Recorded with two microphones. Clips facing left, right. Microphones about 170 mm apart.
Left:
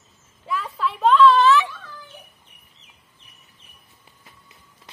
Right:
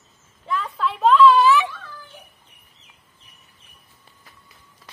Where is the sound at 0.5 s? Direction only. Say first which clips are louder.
Right 1 dB; 5° left (ahead or behind).